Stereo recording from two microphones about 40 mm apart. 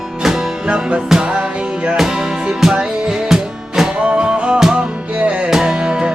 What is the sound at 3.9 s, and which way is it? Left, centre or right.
Music, right.